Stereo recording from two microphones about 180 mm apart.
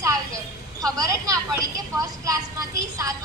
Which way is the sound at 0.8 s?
20° right (ahead or behind).